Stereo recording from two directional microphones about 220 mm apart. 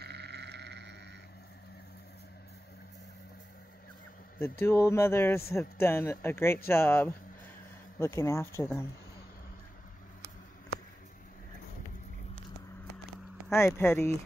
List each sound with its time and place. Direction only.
0.0 s frog: 50° right (ahead or behind)
4.4 s speech: 10° left (ahead or behind)
13.5 s speech: 10° left (ahead or behind)